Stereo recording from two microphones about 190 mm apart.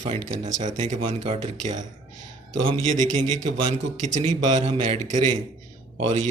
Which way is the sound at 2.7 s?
25° right (ahead or behind).